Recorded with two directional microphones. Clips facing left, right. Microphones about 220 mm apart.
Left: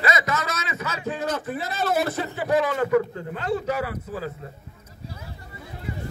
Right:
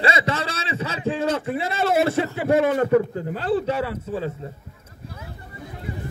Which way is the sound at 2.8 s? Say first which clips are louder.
Right 3 dB; 35° right (ahead or behind).